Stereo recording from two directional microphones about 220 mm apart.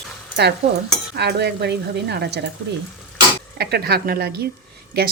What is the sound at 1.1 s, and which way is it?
Speech, 50° right (ahead or behind).